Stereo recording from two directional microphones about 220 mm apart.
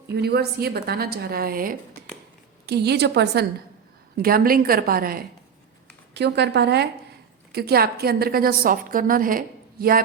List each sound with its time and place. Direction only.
0.2 s a woman's voice: 45° right (ahead or behind)